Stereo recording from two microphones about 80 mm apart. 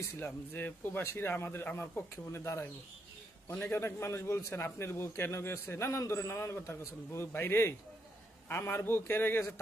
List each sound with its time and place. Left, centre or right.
0.2 s a man's voice: left